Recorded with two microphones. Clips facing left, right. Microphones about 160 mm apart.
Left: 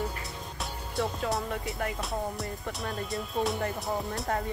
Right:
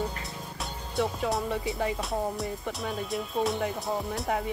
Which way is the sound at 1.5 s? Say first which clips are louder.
Right 4 dB; 20° right (ahead or behind).